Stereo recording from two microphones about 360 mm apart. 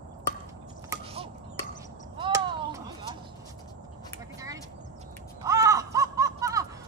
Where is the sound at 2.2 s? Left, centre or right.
Centre.